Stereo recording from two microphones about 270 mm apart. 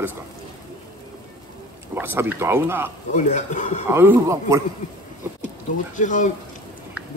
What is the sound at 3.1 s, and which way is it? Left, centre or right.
Speech, left.